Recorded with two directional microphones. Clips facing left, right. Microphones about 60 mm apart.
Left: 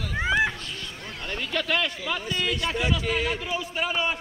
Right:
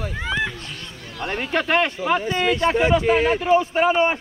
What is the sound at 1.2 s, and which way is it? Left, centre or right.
Speech, right.